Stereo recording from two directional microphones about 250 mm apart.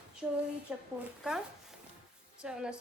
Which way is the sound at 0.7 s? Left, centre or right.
Centre.